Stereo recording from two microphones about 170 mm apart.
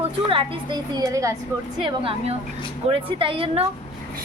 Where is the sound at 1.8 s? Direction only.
30° right (ahead or behind).